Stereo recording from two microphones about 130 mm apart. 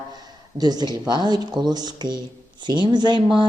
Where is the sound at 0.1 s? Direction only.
30° right (ahead or behind).